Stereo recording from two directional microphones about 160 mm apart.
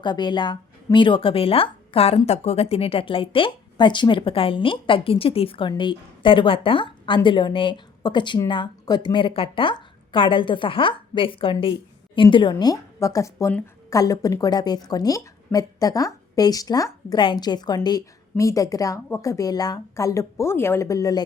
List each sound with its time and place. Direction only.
0.0 s speech: 30° left (ahead or behind)